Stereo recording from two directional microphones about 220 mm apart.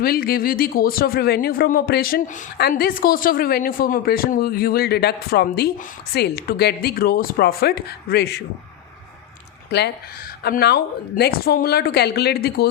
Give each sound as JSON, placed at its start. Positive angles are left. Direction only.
{"t": 0.0, "sound": "speech", "side_deg": 45}
{"t": 9.6, "sound": "speech", "side_deg": 50}